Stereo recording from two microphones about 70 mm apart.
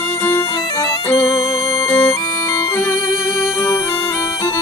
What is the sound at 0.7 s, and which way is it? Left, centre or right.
Music, left.